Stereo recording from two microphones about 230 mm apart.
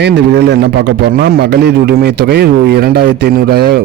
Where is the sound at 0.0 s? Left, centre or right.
Right.